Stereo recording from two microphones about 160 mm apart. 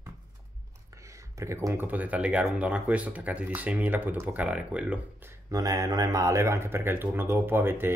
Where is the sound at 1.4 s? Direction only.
20° right (ahead or behind).